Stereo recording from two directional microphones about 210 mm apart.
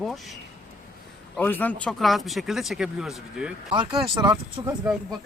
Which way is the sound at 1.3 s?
10° left (ahead or behind).